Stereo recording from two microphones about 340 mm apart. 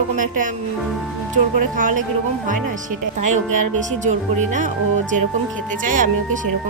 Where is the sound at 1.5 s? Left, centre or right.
Right.